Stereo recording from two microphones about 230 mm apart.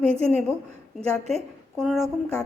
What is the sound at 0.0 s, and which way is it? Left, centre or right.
Speech, right.